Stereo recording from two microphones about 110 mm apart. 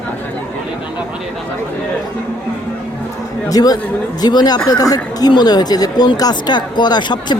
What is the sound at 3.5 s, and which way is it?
Speech, 35° left (ahead or behind).